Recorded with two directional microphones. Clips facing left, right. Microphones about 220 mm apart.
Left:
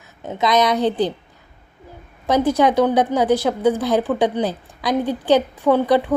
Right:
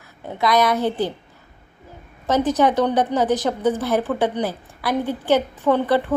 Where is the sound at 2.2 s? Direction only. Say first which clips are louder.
Left 2 dB; 10° left (ahead or behind).